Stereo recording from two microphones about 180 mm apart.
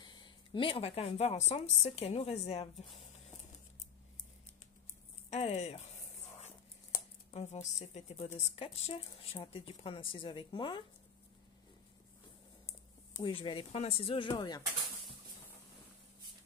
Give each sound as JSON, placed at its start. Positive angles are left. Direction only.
{"t": 0.0, "sound": "a woman's voice", "side_deg": 25}
{"t": 5.3, "sound": "a woman's voice", "side_deg": 35}
{"t": 7.2, "sound": "a woman's voice", "side_deg": 40}
{"t": 13.1, "sound": "speech", "side_deg": 30}